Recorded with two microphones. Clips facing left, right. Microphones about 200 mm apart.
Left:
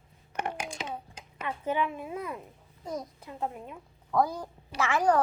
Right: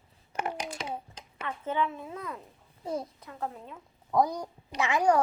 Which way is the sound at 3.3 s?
15° left (ahead or behind).